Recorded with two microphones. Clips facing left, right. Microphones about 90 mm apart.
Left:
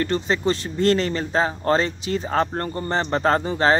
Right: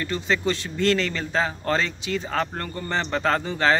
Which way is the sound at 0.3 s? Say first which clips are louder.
Left 2 dB; 25° left (ahead or behind).